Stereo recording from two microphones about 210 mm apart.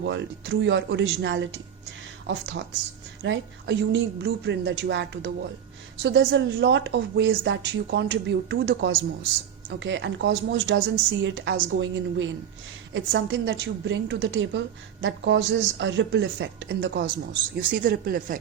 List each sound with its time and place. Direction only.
0.0 s a woman's voice: 55° right (ahead or behind)
17.6 s speech: 40° right (ahead or behind)